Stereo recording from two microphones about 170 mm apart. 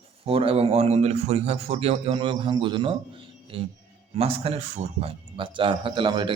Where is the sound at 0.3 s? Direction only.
35° right (ahead or behind).